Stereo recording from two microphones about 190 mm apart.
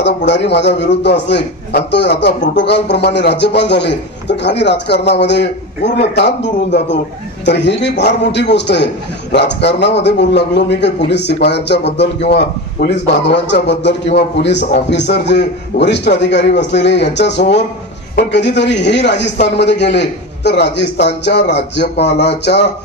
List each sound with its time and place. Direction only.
0.0 s a man's voice: 65° left (ahead or behind)